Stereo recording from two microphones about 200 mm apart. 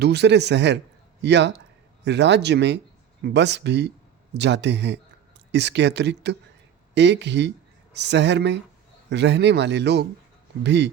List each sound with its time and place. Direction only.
0.0 s speech: 55° right (ahead or behind)